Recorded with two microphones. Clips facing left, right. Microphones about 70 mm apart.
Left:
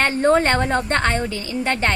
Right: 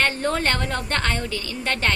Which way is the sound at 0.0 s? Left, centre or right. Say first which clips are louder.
Left 6 dB; left.